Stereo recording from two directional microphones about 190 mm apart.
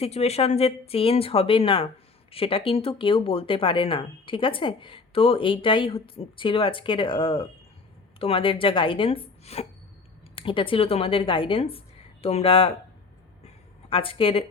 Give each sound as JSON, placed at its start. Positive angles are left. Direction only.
{"t": 0.0, "sound": "speech", "side_deg": 35}
{"t": 13.9, "sound": "speech", "side_deg": 30}